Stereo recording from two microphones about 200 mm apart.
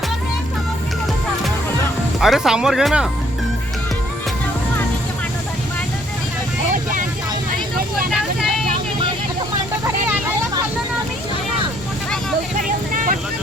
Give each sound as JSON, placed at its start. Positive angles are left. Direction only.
{"t": 2.2, "sound": "speech", "side_deg": 0}
{"t": 8.1, "sound": "vehicle", "side_deg": 0}
{"t": 9.8, "sound": "vehicle", "side_deg": -15}
{"t": 12.5, "sound": "vehicle", "side_deg": -45}